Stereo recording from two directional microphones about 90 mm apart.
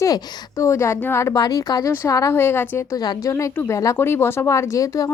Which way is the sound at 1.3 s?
45° left (ahead or behind).